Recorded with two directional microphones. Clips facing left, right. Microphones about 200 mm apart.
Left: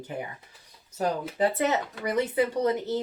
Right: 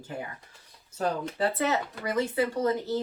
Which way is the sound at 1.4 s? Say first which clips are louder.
Left 3 dB; 15° left (ahead or behind).